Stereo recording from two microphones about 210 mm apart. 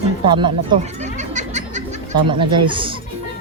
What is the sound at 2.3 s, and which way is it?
Speech, 25° right (ahead or behind).